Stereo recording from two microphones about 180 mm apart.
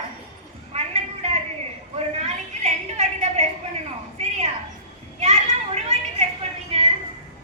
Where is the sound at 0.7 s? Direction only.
35° right (ahead or behind).